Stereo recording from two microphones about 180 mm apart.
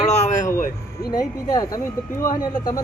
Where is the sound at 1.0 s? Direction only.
20° left (ahead or behind).